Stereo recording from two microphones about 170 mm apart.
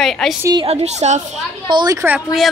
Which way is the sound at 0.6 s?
40° right (ahead or behind).